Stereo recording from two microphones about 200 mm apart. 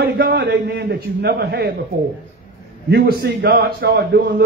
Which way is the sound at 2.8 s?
55° right (ahead or behind).